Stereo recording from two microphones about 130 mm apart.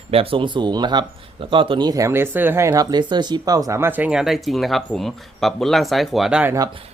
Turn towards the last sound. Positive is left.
turn(degrees=-10)  # may be behind; listen again after turning